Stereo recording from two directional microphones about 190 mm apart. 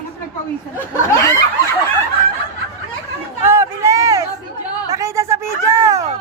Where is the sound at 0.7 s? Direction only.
15° left (ahead or behind).